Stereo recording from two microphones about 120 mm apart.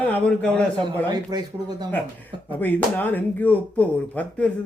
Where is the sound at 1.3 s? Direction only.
35° right (ahead or behind).